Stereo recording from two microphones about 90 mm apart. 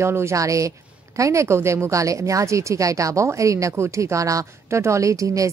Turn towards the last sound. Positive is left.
turn(degrees=-35)  # may be behind; listen again after turning